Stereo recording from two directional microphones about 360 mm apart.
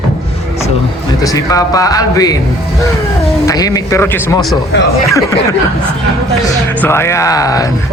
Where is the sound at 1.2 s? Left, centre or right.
Centre.